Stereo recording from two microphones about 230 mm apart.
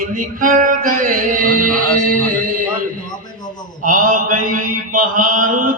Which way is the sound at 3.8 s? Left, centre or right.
Right.